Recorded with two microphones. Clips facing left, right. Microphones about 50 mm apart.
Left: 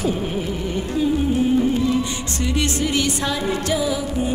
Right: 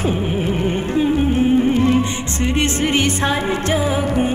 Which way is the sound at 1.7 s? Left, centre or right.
Right.